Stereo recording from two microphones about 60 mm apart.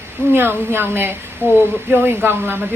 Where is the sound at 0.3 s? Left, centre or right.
Right.